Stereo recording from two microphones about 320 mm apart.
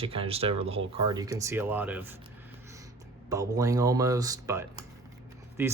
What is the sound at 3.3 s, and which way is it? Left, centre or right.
Speech, centre.